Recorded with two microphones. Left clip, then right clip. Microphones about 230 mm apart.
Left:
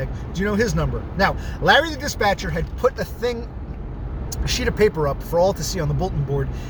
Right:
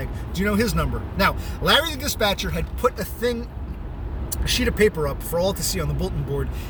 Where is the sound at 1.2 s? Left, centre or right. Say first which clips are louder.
Left 2 dB; centre.